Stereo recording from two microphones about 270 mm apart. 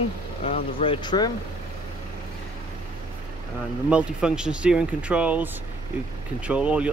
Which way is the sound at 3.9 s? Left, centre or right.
Centre.